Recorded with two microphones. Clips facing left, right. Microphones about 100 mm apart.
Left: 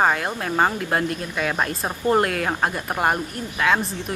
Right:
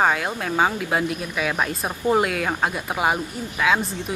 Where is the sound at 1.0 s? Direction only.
15° right (ahead or behind).